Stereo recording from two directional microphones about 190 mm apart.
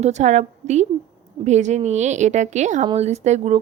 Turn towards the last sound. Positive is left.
turn(degrees=-35)  # may be behind; listen again after turning